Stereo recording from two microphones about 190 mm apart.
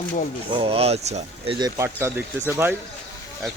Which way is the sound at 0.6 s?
30° right (ahead or behind).